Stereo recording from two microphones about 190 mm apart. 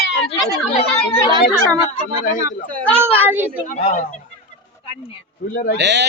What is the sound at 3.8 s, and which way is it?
Speech, 40° left (ahead or behind).